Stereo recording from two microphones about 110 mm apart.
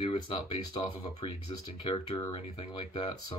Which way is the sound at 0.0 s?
50° left (ahead or behind).